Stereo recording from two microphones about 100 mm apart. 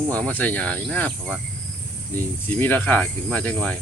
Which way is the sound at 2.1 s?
20° left (ahead or behind).